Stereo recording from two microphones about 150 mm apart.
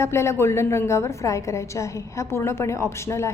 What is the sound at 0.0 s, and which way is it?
A woman's voice, 15° left (ahead or behind).